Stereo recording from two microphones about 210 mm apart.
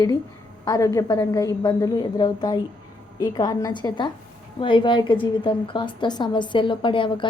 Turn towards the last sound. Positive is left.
turn(degrees=25)  # may be behind; listen again after turning